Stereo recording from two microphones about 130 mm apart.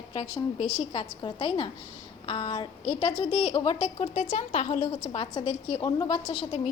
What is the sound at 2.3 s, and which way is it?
Speech, 35° left (ahead or behind).